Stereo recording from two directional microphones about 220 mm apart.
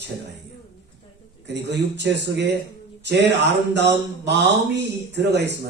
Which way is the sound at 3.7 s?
50° right (ahead or behind).